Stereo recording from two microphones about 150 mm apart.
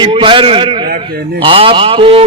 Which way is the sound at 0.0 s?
35° right (ahead or behind).